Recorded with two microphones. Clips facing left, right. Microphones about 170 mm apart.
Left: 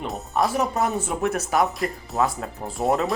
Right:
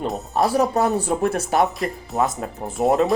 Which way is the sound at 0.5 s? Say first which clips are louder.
Right 4 dB; 35° right (ahead or behind).